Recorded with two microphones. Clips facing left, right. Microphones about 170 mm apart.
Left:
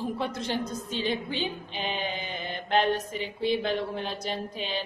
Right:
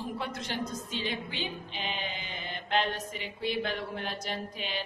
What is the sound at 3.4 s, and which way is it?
Speech, 25° left (ahead or behind).